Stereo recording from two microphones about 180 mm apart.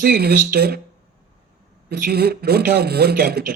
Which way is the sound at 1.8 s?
55° right (ahead or behind).